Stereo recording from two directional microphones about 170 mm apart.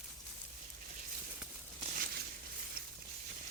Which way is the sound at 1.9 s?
65° right (ahead or behind).